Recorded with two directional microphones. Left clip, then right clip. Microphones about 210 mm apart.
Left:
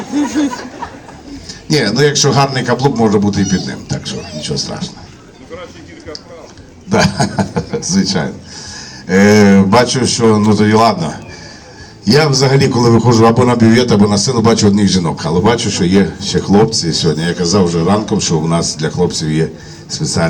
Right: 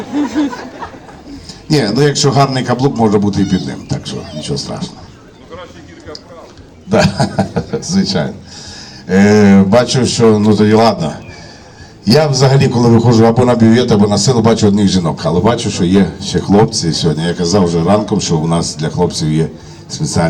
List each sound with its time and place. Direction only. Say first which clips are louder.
1.5 s a man's voice: even; 40° right (ahead or behind)
6.9 s a sound: right 1 dB; 30° right (ahead or behind)
7.9 s a man's voice: left 1 dB; 30° right (ahead or behind)